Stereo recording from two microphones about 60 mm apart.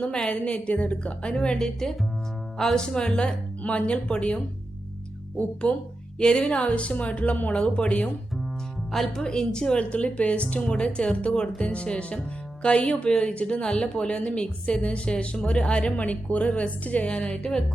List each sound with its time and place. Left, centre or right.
0.0 s a woman's voice: centre
5.6 s a woman's voice: centre
8.9 s a woman's voice: centre